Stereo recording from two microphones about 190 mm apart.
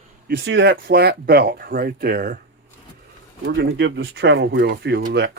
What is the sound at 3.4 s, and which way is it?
Speech, 65° right (ahead or behind).